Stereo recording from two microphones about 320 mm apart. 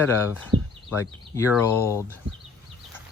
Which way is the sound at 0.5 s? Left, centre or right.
Centre.